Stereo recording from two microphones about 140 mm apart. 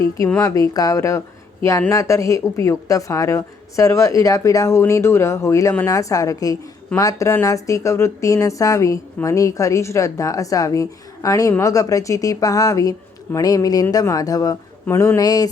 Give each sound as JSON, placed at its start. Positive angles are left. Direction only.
{"t": 0.3, "sound": "speech", "side_deg": 25}